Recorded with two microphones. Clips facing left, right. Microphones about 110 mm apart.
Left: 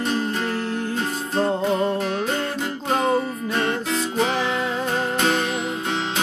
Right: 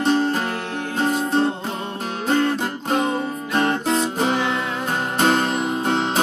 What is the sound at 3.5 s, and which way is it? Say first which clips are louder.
Music: right 5 dB; 40° right (ahead or behind).